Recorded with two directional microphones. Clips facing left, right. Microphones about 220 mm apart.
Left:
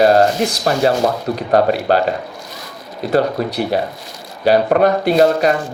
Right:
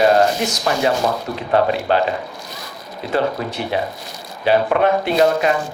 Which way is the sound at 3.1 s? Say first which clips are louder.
Left 4 dB; 40° left (ahead or behind).